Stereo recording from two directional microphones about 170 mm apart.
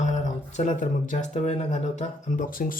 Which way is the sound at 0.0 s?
45° left (ahead or behind).